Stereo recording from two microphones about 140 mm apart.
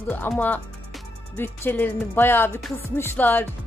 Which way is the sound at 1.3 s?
15° left (ahead or behind).